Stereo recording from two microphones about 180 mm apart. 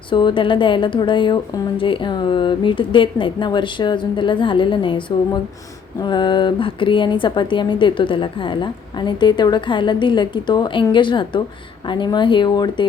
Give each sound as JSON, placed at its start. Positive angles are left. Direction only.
{"t": 0.1, "sound": "a woman's voice", "side_deg": 25}